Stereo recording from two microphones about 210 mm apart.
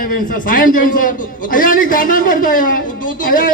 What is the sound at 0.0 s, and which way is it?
A man's voice, 40° left (ahead or behind).